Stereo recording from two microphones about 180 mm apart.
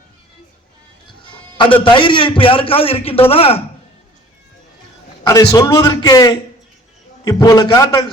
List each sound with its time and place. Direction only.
1.3 s music: 25° left (ahead or behind)
1.8 s a man's voice: 25° left (ahead or behind)
5.2 s a man's voice: 20° left (ahead or behind)